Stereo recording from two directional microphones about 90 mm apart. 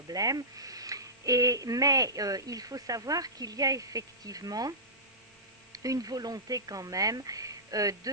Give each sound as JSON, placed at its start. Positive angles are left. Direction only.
{"t": 0.1, "sound": "speech", "side_deg": -45}
{"t": 5.7, "sound": "speech", "side_deg": -40}